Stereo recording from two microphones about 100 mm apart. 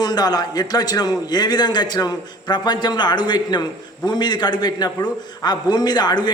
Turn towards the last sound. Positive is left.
turn(degrees=45)  # may be behind; listen again after turning